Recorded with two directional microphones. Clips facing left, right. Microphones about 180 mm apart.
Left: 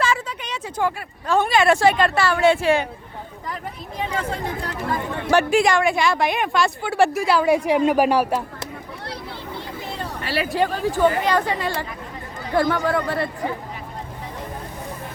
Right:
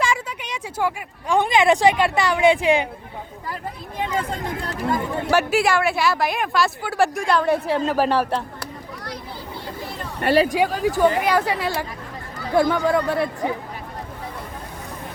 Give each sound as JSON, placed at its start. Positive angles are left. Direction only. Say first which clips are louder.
{"t": 0.0, "sound": "speech", "louder": "left 1 dB", "side_deg": -10}
{"t": 5.3, "sound": "a woman's voice", "louder": "left 2 dB", "side_deg": -5}
{"t": 10.2, "sound": "speech", "louder": "right 9 dB", "side_deg": -55}
{"t": 10.5, "sound": "speech", "louder": "right 1 dB", "side_deg": -10}